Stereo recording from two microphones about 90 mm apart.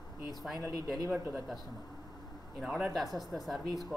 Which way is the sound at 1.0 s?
30° right (ahead or behind).